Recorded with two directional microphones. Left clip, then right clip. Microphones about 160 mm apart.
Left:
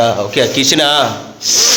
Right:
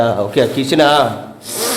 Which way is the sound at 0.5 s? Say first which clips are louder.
Even; 5° right (ahead or behind).